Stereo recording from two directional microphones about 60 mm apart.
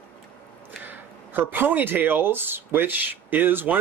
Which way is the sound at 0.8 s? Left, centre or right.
Right.